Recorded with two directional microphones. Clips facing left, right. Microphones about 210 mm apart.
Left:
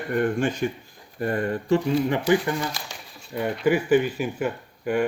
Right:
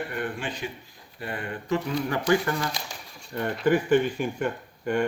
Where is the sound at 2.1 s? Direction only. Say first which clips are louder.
Left 2 dB; 15° left (ahead or behind).